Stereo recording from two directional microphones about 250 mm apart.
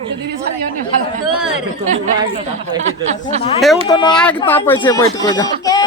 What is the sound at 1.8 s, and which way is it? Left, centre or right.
Speech, right.